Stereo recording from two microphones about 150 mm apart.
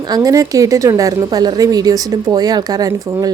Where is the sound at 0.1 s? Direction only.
25° right (ahead or behind).